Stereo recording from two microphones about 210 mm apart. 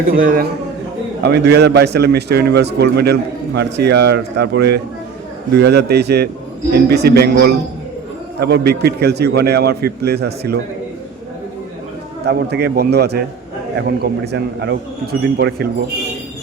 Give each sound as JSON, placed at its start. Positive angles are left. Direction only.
{"t": 0.1, "sound": "a man's voice", "side_deg": -40}
{"t": 1.2, "sound": "a man's voice", "side_deg": -55}
{"t": 12.2, "sound": "a man's voice", "side_deg": -50}